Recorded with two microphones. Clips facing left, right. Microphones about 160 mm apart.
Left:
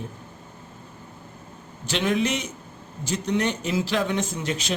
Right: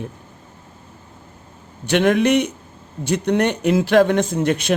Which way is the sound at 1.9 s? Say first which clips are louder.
Right 8 dB; 60° right (ahead or behind).